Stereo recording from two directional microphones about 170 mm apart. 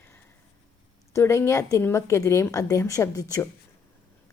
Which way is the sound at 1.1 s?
15° left (ahead or behind).